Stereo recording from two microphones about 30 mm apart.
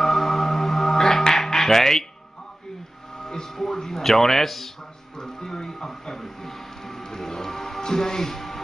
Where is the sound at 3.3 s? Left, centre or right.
Left.